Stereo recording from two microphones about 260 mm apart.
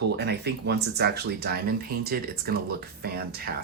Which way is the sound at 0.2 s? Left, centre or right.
Right.